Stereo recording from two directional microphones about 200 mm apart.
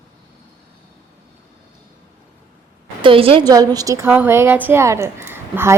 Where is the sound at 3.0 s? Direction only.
25° right (ahead or behind).